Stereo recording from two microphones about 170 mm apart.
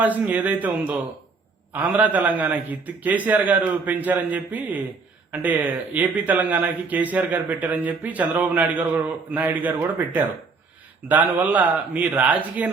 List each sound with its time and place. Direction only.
0.0 s speech: 10° right (ahead or behind)